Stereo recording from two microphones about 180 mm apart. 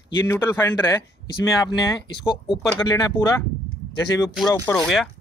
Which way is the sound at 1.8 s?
25° left (ahead or behind).